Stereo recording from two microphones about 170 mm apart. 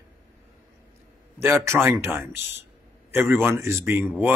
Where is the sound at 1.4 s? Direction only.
15° right (ahead or behind).